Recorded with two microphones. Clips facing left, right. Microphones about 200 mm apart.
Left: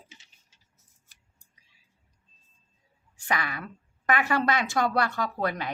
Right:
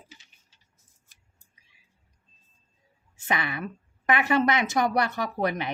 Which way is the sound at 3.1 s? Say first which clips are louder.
Right 2 dB; 25° right (ahead or behind).